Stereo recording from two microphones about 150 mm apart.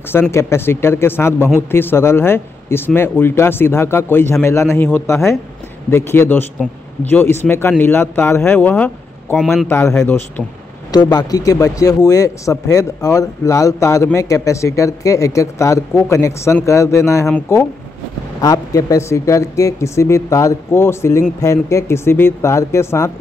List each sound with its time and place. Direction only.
0.1 s speech: 15° left (ahead or behind)
10.9 s speech: 30° left (ahead or behind)